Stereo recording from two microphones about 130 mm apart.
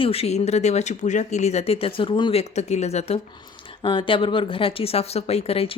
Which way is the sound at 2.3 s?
55° left (ahead or behind).